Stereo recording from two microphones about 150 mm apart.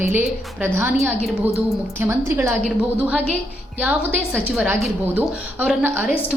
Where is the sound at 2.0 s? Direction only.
15° right (ahead or behind).